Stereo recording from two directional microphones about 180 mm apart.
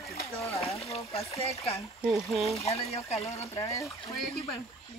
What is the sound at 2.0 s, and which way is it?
Speech, centre (ahead or behind).